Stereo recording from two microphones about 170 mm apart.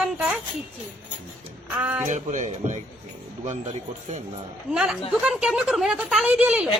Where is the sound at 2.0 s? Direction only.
45° right (ahead or behind).